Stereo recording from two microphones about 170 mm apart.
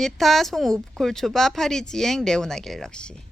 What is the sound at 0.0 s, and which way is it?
Speech, centre (ahead or behind).